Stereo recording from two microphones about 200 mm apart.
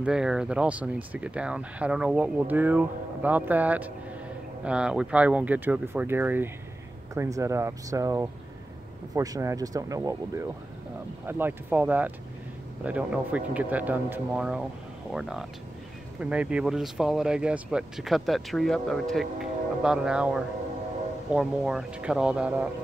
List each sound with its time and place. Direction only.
0.0 s speech: 5° right (ahead or behind)